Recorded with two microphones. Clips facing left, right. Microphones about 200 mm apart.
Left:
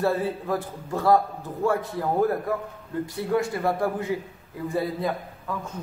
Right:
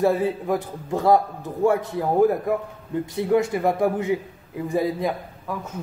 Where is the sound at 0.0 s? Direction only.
15° right (ahead or behind).